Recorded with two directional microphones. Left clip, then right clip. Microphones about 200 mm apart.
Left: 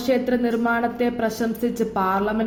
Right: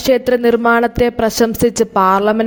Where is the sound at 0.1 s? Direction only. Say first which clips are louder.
Right 9 dB; 50° right (ahead or behind).